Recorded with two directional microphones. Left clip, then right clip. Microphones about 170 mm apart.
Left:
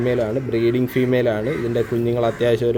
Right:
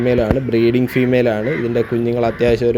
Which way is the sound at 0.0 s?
40° right (ahead or behind).